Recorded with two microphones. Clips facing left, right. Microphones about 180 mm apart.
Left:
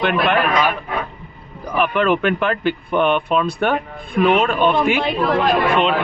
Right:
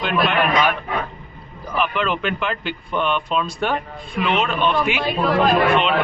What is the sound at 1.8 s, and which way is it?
Speech, 50° left (ahead or behind).